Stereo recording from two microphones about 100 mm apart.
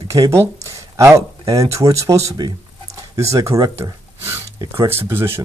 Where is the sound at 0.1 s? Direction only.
30° right (ahead or behind).